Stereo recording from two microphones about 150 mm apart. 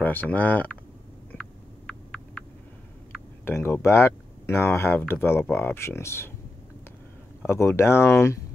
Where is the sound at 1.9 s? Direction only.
5° left (ahead or behind).